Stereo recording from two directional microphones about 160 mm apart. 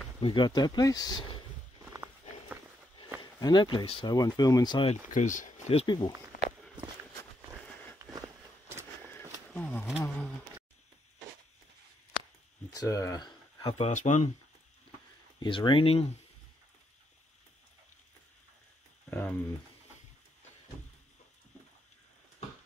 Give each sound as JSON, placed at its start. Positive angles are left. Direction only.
{"t": 0.2, "sound": "speech", "side_deg": 25}
{"t": 3.2, "sound": "speech", "side_deg": 25}
{"t": 5.1, "sound": "speech", "side_deg": 55}
{"t": 5.7, "sound": "speech", "side_deg": 35}
{"t": 9.5, "sound": "wild animals", "side_deg": 10}
{"t": 10.0, "sound": "a sound", "side_deg": 5}
{"t": 12.7, "sound": "a sound", "side_deg": 20}
{"t": 13.7, "sound": "speech", "side_deg": 45}
{"t": 15.3, "sound": "speech", "side_deg": 30}
{"t": 19.0, "sound": "a sound", "side_deg": 10}